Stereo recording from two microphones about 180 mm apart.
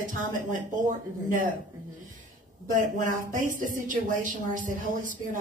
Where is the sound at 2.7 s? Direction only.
45° right (ahead or behind).